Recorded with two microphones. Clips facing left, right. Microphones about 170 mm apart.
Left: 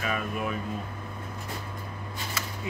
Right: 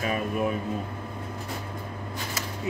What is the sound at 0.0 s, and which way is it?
Speech, 35° right (ahead or behind).